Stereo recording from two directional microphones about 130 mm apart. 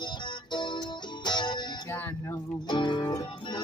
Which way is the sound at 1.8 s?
15° left (ahead or behind).